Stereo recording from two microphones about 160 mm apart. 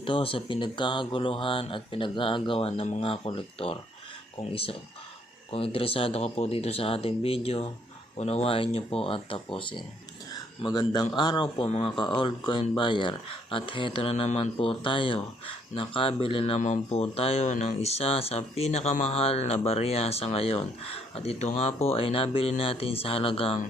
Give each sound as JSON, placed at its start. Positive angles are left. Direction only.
{"t": 0.0, "sound": "a man's voice", "side_deg": 35}
{"t": 16.6, "sound": "speech", "side_deg": 50}